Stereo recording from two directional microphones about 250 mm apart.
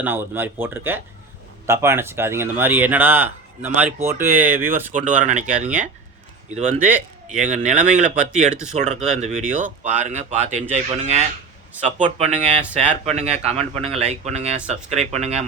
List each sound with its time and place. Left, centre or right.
0.0 s speech: centre
4.9 s speech: right
5.5 s speech: centre
6.5 s speech: right